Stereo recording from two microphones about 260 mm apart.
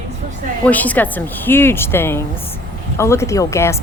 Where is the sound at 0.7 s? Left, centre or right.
Centre.